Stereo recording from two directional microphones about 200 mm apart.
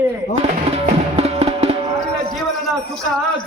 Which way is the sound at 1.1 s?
30° right (ahead or behind).